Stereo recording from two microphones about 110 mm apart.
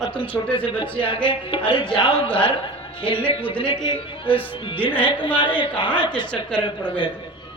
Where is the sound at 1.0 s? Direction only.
50° left (ahead or behind).